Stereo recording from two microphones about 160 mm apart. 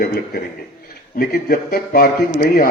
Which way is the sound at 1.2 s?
65° left (ahead or behind).